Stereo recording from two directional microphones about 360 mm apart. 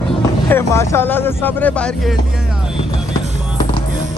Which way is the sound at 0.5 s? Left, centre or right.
Centre.